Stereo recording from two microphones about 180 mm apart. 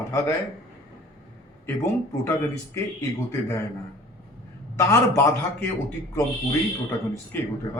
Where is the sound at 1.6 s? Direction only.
15° left (ahead or behind).